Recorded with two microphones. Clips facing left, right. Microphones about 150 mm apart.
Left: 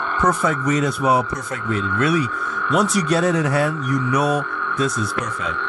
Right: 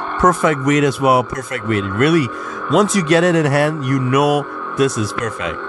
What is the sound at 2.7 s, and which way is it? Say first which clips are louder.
Speech: right 5 dB; 90° right.